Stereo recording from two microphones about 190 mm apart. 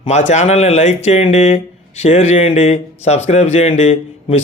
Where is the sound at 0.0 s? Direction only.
35° left (ahead or behind).